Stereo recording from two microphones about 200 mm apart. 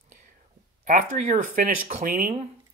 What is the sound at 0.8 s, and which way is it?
Speech, 40° right (ahead or behind).